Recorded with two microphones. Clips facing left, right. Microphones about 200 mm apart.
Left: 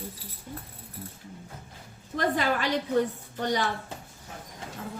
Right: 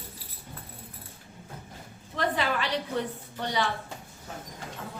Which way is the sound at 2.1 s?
45° left (ahead or behind).